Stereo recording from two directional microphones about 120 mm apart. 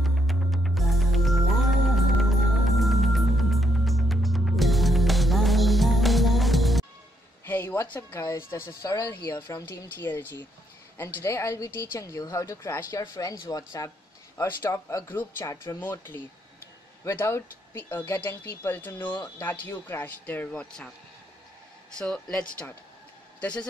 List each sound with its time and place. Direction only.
0.0 s music: centre (ahead or behind)
7.4 s a woman's voice: 15° left (ahead or behind)
21.9 s speech: 5° left (ahead or behind)